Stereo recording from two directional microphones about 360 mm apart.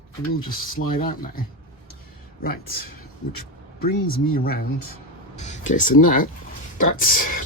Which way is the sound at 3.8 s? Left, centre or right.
Left.